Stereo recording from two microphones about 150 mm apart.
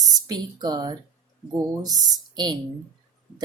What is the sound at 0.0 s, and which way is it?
Speech, 25° right (ahead or behind).